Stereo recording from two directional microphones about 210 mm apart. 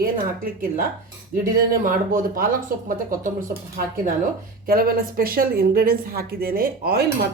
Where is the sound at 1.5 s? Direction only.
40° right (ahead or behind).